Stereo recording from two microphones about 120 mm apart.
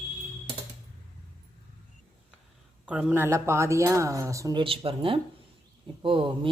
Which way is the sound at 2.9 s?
10° right (ahead or behind).